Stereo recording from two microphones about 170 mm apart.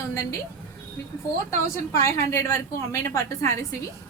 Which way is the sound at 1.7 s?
15° left (ahead or behind).